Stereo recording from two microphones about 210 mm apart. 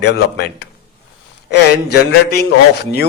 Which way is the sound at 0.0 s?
50° left (ahead or behind).